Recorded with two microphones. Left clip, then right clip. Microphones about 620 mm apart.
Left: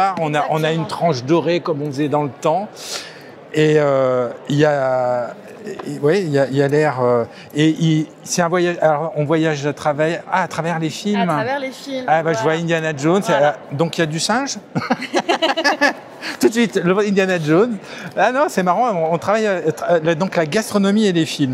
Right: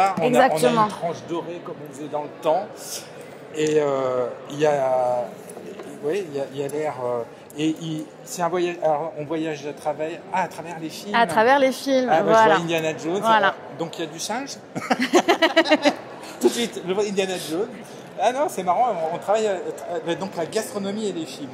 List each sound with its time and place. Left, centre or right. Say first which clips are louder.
0.7 s a man's voice: left 1 dB; left
11.1 s a woman's voice: right 4 dB; right
12.1 s a man's voice: even; left
13.3 s a woman's voice: left 1 dB; right
13.7 s a man's voice: left 10 dB; left
15.4 s speech: left 1 dB; right
16.3 s a man's voice: left 6 dB; left